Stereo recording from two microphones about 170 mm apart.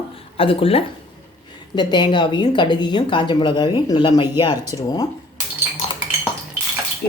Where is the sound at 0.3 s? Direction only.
35° left (ahead or behind).